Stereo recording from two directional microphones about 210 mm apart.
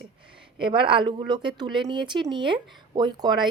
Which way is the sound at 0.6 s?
25° right (ahead or behind).